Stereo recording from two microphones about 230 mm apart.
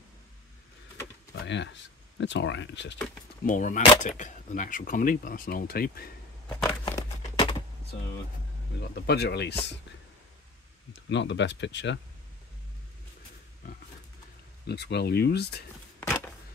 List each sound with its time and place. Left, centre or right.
1.4 s speech: left
3.4 s speech: left
6.5 s a sound: centre; by 7.6 s left
8.8 s speech: left
10.9 s speech: left
14.7 s speech: left
16.0 s a sound: centre